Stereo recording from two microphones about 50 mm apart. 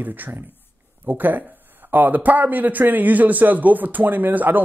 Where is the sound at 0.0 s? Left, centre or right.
Right.